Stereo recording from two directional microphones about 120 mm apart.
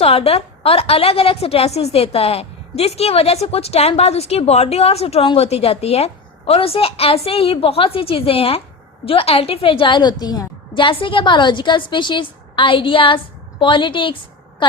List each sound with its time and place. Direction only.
0.0 s a woman's voice: 55° left (ahead or behind)